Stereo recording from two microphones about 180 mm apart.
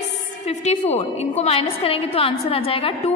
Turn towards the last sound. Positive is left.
turn(degrees=30)  # may be behind; listen again after turning